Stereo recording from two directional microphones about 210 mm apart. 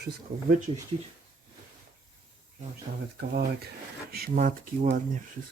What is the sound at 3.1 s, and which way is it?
Speech, 50° right (ahead or behind).